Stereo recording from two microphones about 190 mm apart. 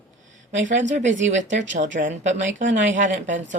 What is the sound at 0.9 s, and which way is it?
Speech, 40° right (ahead or behind).